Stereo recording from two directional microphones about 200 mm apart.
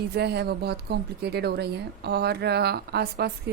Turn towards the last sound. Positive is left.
turn(degrees=-50)  # may be behind; listen again after turning